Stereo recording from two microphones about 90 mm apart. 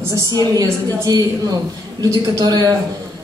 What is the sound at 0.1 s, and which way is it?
A woman's voice, 40° right (ahead or behind).